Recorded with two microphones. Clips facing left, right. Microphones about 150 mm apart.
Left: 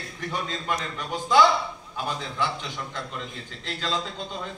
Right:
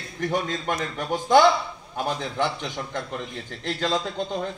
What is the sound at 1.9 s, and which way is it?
A man's voice, 55° right (ahead or behind).